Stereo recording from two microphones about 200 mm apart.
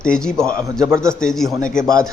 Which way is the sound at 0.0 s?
5° left (ahead or behind).